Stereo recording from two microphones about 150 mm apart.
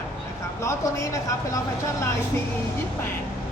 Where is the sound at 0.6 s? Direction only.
20° left (ahead or behind).